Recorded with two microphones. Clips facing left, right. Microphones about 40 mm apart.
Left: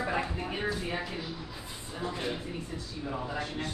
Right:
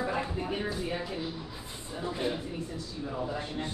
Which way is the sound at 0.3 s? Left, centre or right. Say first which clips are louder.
Even; centre.